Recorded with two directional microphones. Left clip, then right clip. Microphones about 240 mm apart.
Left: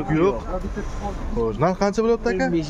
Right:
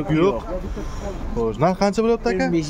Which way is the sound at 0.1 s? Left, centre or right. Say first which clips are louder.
Right 1 dB; centre.